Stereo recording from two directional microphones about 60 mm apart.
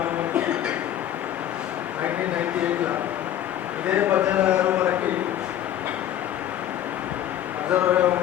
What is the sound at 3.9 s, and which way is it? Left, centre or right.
Speech, right.